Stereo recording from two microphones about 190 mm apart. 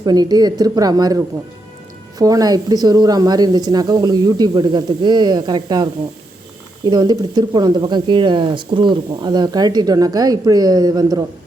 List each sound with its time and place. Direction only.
0.0 s speech: 20° right (ahead or behind)